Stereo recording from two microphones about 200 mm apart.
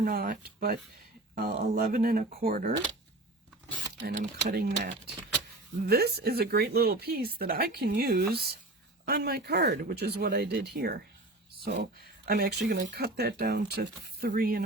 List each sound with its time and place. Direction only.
0.0 s speech: 45° right (ahead or behind)
4.0 s speech: 50° right (ahead or behind)
5.9 s speech: 55° right (ahead or behind)